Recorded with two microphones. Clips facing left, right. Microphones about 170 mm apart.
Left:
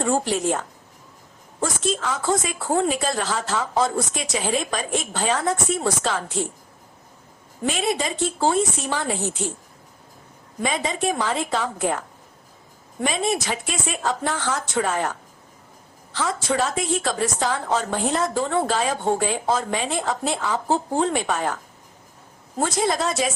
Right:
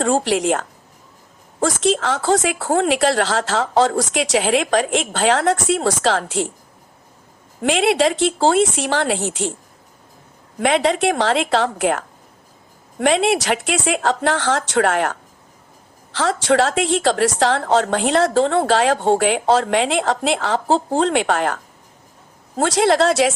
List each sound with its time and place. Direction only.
0.0 s speech: 90° right
1.6 s speech: 90° right
7.6 s speech: 90° right
10.6 s a woman's voice: 80° right
22.5 s speech: 90° right